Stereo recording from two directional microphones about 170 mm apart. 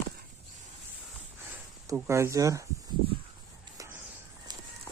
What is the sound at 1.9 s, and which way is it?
Speech, 15° right (ahead or behind).